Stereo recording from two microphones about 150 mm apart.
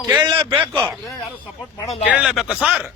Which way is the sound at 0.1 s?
30° right (ahead or behind).